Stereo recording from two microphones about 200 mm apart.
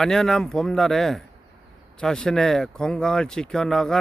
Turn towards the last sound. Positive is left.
turn(degrees=5)  # may be behind; listen again after turning